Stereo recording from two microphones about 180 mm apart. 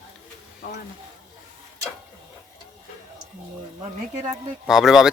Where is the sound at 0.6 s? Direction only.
55° left (ahead or behind).